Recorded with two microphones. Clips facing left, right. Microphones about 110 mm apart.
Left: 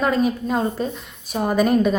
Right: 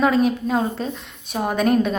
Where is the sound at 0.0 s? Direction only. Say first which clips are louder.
Right 2 dB; centre (ahead or behind).